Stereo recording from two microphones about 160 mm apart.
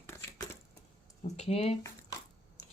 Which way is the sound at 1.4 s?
40° left (ahead or behind).